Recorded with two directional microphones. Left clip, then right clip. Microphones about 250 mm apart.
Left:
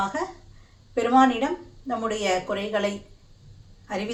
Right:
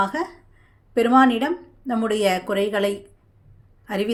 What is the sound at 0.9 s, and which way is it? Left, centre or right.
Speech, right.